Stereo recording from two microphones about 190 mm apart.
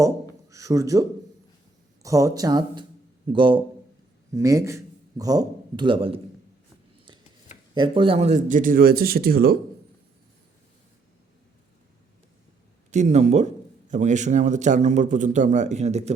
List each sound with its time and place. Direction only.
0.5 s a man's voice: 15° right (ahead or behind)
2.0 s a man's voice: 15° right (ahead or behind)
7.7 s speech: 25° right (ahead or behind); by 9.6 s 55° right (ahead or behind)
12.9 s a man's voice: 35° right (ahead or behind)